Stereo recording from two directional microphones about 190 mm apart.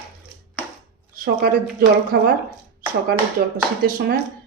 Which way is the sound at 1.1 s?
50° right (ahead or behind).